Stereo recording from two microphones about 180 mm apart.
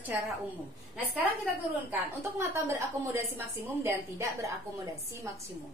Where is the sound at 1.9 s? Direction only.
15° right (ahead or behind).